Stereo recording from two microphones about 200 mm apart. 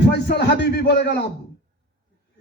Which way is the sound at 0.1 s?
55° left (ahead or behind).